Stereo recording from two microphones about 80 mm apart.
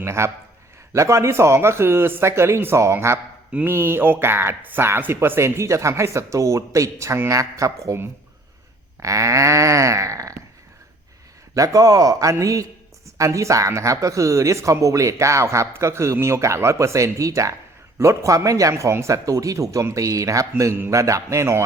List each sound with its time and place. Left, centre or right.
0.0 s a man's voice: right
9.0 s speech: right
11.5 s speech: right